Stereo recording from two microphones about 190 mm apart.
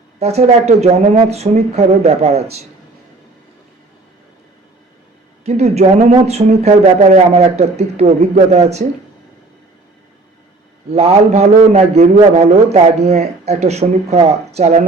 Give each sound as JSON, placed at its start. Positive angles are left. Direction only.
{"t": 0.2, "sound": "a man's voice", "side_deg": -35}
{"t": 5.5, "sound": "a man's voice", "side_deg": -35}
{"t": 10.9, "sound": "a man's voice", "side_deg": -35}